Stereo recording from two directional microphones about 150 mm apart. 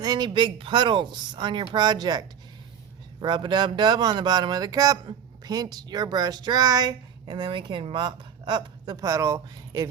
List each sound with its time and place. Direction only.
0.0 s speech: 30° right (ahead or behind)